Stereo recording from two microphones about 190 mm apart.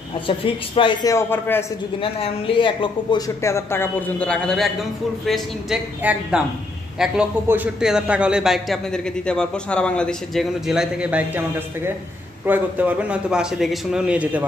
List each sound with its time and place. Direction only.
0.3 s speech: 25° left (ahead or behind)
1.1 s speech: 15° left (ahead or behind)
2.0 s a man's voice: 30° left (ahead or behind); by 14.4 s 5° right (ahead or behind)